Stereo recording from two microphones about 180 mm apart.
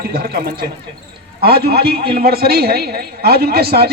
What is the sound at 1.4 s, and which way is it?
A woman's voice, 60° right (ahead or behind).